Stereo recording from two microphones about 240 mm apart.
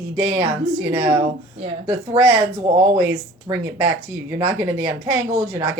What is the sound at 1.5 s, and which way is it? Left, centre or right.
Speech, right.